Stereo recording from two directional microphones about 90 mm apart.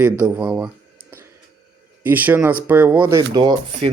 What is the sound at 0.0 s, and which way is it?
Speech, 15° right (ahead or behind).